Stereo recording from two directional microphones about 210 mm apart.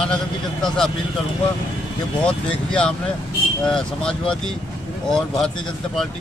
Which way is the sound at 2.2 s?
5° left (ahead or behind).